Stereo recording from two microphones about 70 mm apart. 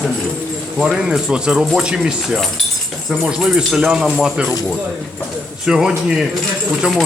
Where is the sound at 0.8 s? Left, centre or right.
Centre.